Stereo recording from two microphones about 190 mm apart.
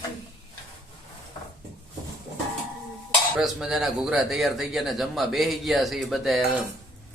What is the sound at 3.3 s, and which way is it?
Speech, 5° right (ahead or behind).